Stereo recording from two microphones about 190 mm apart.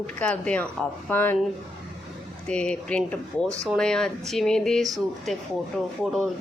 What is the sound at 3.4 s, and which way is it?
Speech, 15° right (ahead or behind).